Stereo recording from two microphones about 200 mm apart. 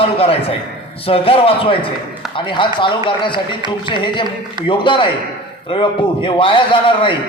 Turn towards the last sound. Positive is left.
turn(degrees=25)  # may be behind; listen again after turning